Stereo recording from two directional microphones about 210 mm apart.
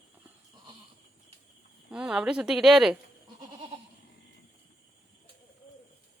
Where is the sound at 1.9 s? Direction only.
5° right (ahead or behind).